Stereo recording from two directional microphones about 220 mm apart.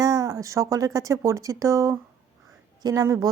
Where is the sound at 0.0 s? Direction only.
15° right (ahead or behind).